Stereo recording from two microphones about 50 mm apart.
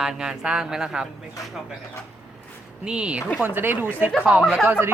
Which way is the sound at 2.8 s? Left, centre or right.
Right.